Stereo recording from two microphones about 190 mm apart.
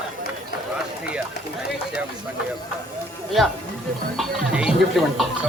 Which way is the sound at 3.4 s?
Centre (ahead or behind).